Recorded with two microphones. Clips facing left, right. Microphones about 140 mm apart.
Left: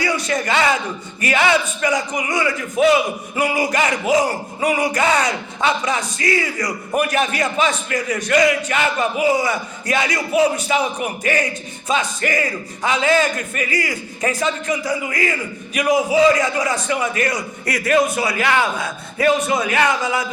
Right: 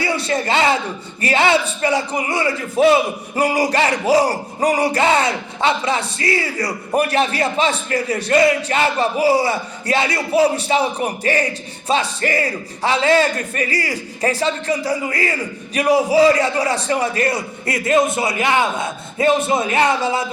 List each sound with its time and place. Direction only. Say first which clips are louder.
0.0 s a man's voice: right 1 dB; 30° right (ahead or behind)